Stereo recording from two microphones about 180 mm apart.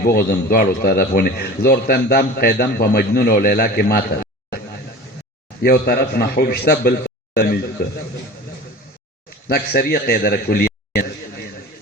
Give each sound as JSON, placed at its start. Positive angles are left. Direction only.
{"t": 0.0, "sound": "a man's voice", "side_deg": 60}
{"t": 5.6, "sound": "a man's voice", "side_deg": 60}
{"t": 9.5, "sound": "a man's voice", "side_deg": 60}